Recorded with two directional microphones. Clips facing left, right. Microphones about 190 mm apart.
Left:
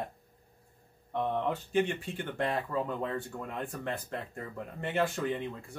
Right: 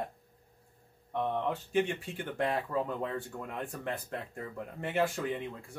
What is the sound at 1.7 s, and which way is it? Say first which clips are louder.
Speech: left 1 dB; 10° right (ahead or behind).